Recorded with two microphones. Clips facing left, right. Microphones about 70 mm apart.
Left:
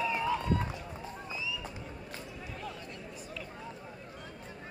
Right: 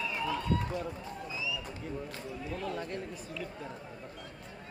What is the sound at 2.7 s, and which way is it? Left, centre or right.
Chatter, right.